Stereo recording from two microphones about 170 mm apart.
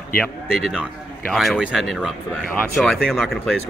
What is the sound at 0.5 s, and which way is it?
Speech, 5° right (ahead or behind).